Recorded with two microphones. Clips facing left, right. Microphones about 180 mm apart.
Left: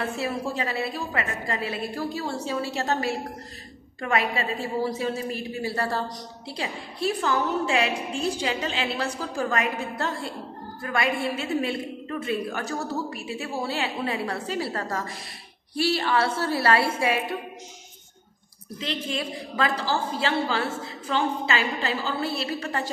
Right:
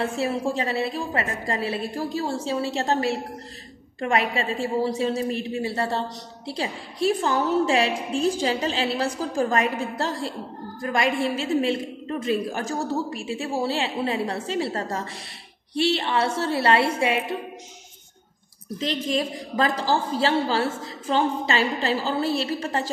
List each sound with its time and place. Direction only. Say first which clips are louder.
0.0 s a woman's voice: right 4 dB; 30° right (ahead or behind)
18.8 s a woman's voice: right 5 dB; 35° right (ahead or behind)